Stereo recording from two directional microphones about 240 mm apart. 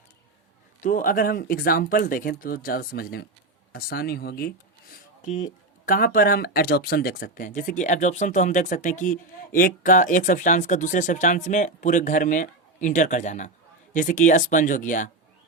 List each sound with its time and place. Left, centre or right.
0.8 s speech: left
5.2 s speech: left